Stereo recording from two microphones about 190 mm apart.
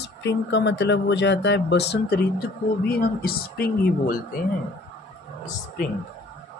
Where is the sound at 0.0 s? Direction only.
65° left (ahead or behind); by 4.2 s 50° left (ahead or behind).